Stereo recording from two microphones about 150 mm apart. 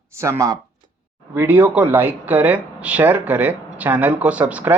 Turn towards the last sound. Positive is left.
turn(degrees=-10)  # may be behind; listen again after turning